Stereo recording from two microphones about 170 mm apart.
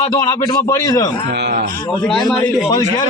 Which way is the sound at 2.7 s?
25° left (ahead or behind).